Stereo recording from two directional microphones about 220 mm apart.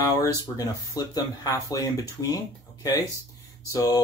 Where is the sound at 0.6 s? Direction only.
15° left (ahead or behind).